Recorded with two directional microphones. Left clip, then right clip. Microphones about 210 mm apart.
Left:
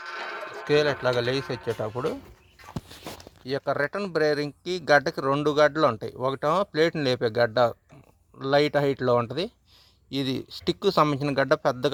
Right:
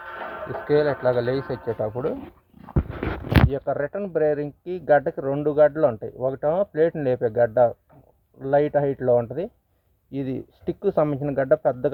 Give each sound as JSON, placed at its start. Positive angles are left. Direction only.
{"t": 0.6, "sound": "speech", "side_deg": 20}
{"t": 3.5, "sound": "speech", "side_deg": 20}